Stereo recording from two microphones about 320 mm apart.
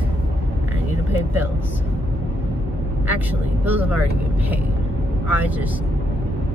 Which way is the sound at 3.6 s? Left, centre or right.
Centre.